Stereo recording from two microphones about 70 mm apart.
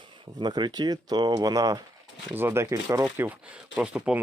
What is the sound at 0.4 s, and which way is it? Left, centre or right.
Speech, right.